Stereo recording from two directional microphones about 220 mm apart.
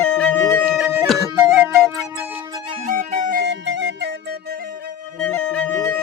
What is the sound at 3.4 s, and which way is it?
Music, 50° right (ahead or behind).